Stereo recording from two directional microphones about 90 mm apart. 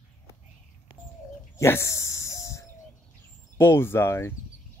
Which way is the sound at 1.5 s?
30° left (ahead or behind).